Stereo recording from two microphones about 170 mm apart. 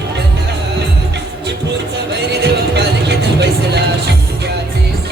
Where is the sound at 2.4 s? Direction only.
80° right.